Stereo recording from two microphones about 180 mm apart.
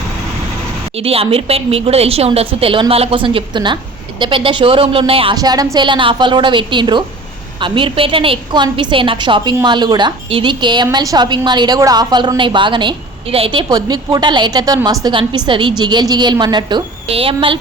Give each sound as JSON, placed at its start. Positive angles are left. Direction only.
{"t": 0.9, "sound": "a woman's voice", "side_deg": -35}